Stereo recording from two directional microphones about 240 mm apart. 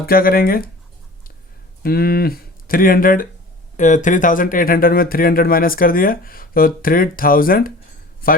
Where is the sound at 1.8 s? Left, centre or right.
Left.